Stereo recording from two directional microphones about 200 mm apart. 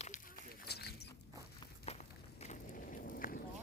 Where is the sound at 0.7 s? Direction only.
55° left (ahead or behind).